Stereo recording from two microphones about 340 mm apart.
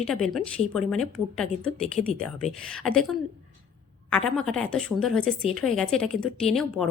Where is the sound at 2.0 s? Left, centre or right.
Centre.